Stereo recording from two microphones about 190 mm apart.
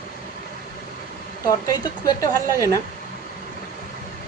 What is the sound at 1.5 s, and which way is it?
A woman's voice, 20° left (ahead or behind).